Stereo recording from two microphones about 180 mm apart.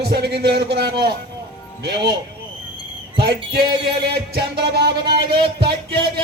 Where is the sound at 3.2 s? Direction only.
65° right (ahead or behind).